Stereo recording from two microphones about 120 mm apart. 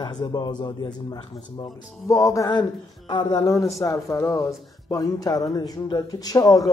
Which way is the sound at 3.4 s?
25° left (ahead or behind).